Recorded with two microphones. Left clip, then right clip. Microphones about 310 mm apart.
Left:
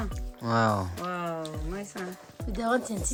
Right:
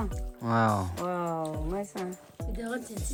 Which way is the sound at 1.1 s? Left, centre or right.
Centre.